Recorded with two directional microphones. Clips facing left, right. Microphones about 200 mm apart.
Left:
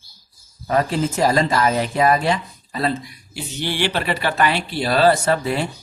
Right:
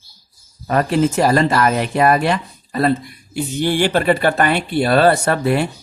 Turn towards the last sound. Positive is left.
turn(degrees=-60)  # may be behind; listen again after turning